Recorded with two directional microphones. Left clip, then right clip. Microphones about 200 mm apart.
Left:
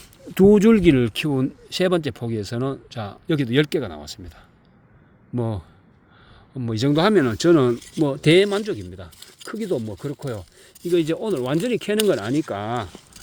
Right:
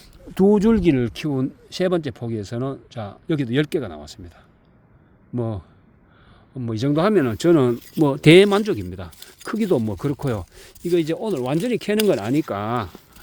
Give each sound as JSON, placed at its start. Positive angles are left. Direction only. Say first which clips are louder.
{"t": 0.0, "sound": "speech", "louder": "left 3 dB", "side_deg": 10}
{"t": 5.3, "sound": "speech", "louder": "even", "side_deg": 5}
{"t": 8.0, "sound": "speech", "louder": "right 4 dB", "side_deg": -25}
{"t": 10.9, "sound": "speech", "louder": "even", "side_deg": -5}